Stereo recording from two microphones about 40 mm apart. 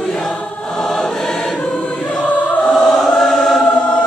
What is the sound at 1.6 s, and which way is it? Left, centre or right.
Choir, left.